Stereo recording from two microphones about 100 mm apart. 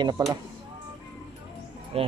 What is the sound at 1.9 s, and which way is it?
Speech, 75° right (ahead or behind).